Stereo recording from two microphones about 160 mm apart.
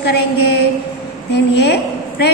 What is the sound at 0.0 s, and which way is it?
A woman's voice, 90° left.